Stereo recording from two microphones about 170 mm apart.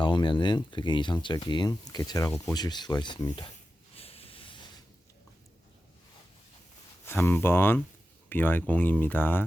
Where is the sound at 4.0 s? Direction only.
35° left (ahead or behind).